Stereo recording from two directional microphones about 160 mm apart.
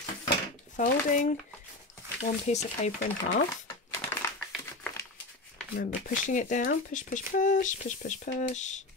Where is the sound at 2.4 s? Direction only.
45° left (ahead or behind).